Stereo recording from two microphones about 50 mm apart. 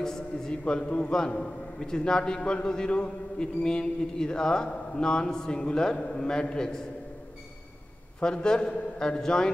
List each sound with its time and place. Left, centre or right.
0.0 s a man's voice: centre
8.2 s a man's voice: centre